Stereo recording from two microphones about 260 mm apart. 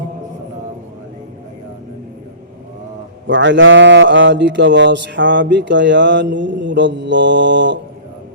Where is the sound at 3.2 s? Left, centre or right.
Right.